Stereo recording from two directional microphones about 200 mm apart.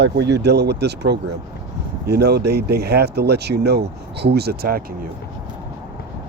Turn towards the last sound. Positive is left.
turn(degrees=-50)  # may be behind; listen again after turning